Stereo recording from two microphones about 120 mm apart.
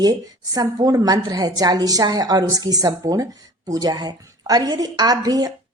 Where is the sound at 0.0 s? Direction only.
35° right (ahead or behind).